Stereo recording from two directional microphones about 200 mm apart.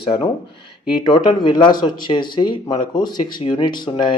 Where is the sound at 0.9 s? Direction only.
20° left (ahead or behind).